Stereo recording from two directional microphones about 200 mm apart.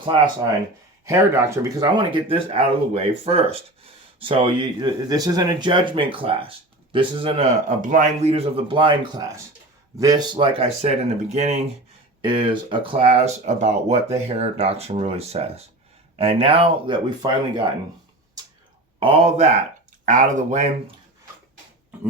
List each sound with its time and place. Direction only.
1.0 s speech: 15° right (ahead or behind)
7.8 s speech: 40° right (ahead or behind); by 17.6 s 20° right (ahead or behind)
18.9 s speech: 30° right (ahead or behind)